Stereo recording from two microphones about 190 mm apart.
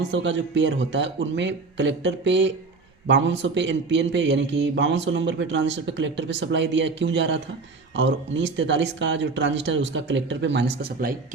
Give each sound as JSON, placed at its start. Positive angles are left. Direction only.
{"t": 0.1, "sound": "a man's voice", "side_deg": -70}